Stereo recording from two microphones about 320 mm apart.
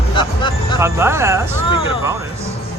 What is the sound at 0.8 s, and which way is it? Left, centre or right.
Speech, centre.